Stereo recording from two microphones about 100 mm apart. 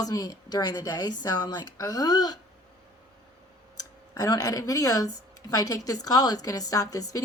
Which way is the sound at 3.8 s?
40° left (ahead or behind).